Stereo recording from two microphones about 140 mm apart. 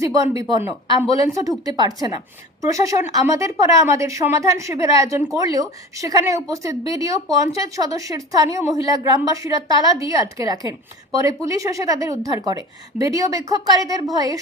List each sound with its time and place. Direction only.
0.0 s a woman's voice: 25° right (ahead or behind)